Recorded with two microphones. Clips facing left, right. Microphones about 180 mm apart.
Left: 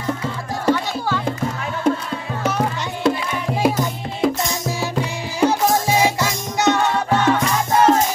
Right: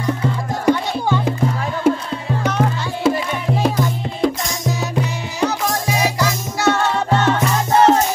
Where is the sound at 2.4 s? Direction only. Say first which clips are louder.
Right 1 dB; 5° left (ahead or behind).